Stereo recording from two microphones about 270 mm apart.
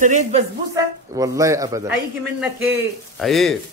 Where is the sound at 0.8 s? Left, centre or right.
Centre.